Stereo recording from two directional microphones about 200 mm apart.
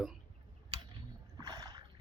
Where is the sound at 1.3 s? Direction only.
20° right (ahead or behind).